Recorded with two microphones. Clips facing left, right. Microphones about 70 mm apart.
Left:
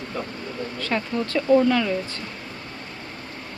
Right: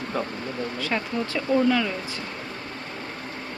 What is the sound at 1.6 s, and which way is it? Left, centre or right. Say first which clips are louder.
Speech: left 2 dB; centre.